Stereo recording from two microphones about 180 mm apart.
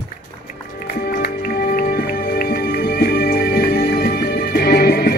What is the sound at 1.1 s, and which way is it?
Music, 60° left (ahead or behind).